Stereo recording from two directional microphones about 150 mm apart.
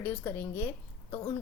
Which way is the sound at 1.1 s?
30° left (ahead or behind).